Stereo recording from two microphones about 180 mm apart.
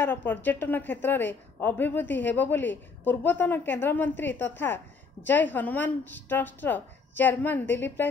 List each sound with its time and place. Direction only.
0.0 s a woman's voice: 10° left (ahead or behind)